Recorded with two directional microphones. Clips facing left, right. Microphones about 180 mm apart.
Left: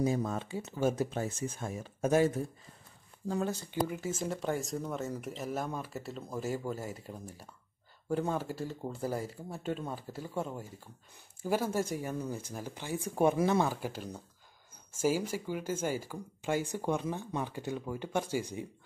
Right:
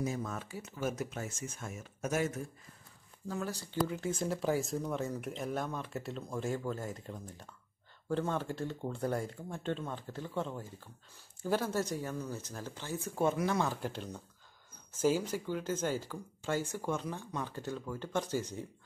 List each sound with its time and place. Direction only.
0.0 s speech: 30° left (ahead or behind)
3.8 s speech: 5° left (ahead or behind)